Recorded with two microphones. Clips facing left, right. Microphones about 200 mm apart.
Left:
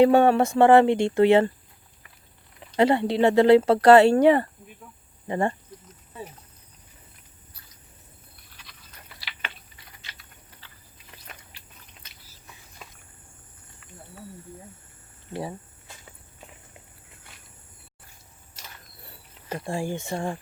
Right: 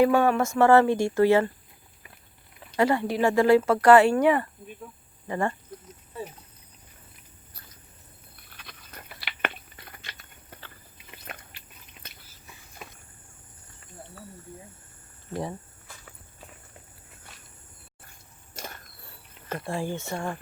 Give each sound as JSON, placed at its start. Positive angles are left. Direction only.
{"t": 0.0, "sound": "speech", "side_deg": 25}
{"t": 0.6, "sound": "speech", "side_deg": 15}
{"t": 2.7, "sound": "speech", "side_deg": 20}
{"t": 3.6, "sound": "speech", "side_deg": 35}
{"t": 9.1, "sound": "biting", "side_deg": -55}
{"t": 18.5, "sound": "a sound", "side_deg": -50}
{"t": 19.6, "sound": "speech", "side_deg": 15}